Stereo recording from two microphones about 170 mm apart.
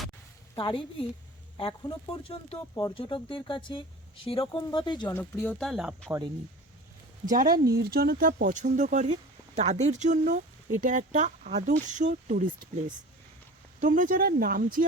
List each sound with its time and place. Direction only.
0.5 s speech: 30° left (ahead or behind)
5.0 s speech: 15° left (ahead or behind)
7.3 s speech: 55° right (ahead or behind)